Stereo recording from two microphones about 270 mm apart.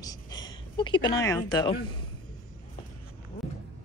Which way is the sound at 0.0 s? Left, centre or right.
Centre.